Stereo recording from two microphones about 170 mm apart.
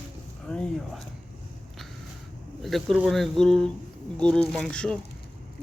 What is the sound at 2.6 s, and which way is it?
Speech, centre (ahead or behind).